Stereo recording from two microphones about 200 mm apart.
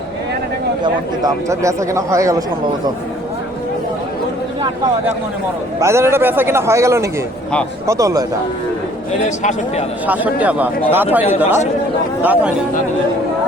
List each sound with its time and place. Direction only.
1.2 s speech: 15° right (ahead or behind)
5.8 s speech: 15° right (ahead or behind)
9.4 s a man's voice: 35° left (ahead or behind)
10.1 s speech: 10° right (ahead or behind)